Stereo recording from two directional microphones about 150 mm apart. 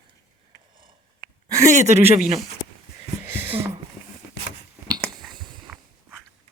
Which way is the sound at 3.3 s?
15° right (ahead or behind).